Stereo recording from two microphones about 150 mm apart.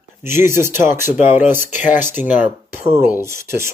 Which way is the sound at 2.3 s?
10° right (ahead or behind).